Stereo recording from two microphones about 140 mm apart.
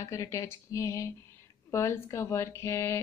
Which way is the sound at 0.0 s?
20° left (ahead or behind).